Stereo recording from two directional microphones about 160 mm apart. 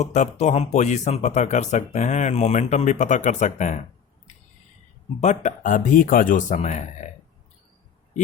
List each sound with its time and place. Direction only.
0.0 s speech: 45° left (ahead or behind)
5.2 s speech: 50° left (ahead or behind)